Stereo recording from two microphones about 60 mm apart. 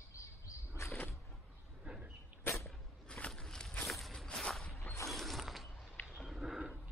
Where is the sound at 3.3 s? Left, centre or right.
Centre.